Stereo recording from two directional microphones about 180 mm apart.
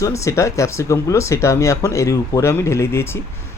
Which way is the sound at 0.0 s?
15° left (ahead or behind).